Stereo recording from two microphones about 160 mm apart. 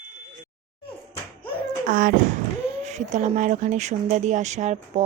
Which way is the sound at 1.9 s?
55° right (ahead or behind).